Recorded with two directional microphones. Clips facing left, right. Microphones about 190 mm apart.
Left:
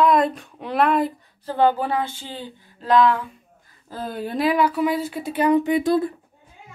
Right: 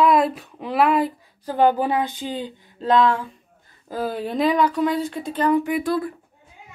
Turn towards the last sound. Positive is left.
turn(degrees=25)  # may be behind; listen again after turning